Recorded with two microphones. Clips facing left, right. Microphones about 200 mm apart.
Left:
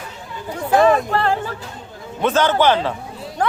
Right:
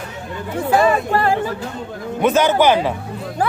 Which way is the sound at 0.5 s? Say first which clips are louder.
Left 1 dB; 10° right (ahead or behind).